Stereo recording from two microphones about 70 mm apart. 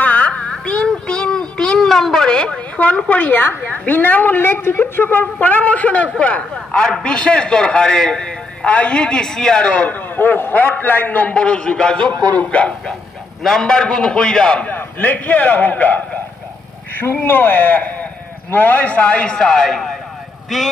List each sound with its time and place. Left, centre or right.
0.0 s a sound: left
5.2 s a man's voice: left
10.1 s a man's voice: left
13.4 s a man's voice: centre
14.7 s a man's voice: left; by 20.7 s centre